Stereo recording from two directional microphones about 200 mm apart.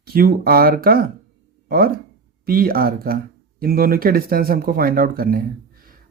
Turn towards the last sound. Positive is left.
turn(degrees=-45)  # may be behind; listen again after turning